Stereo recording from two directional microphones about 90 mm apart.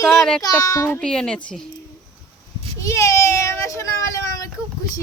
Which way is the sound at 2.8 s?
35° left (ahead or behind).